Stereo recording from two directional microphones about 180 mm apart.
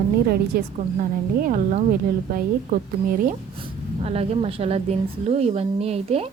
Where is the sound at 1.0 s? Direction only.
45° right (ahead or behind).